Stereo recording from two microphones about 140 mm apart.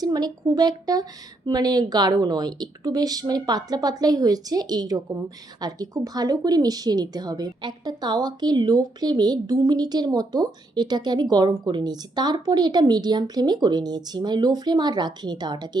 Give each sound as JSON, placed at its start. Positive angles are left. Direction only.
{"t": 0.0, "sound": "speech", "side_deg": -25}